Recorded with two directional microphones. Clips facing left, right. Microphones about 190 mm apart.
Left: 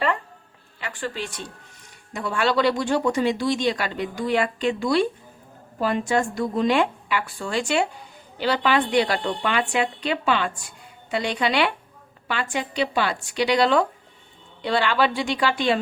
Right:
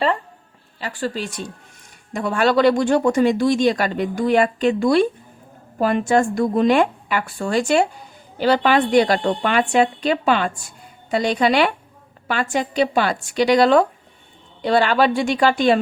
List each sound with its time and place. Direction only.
0.8 s a woman's voice: 35° right (ahead or behind)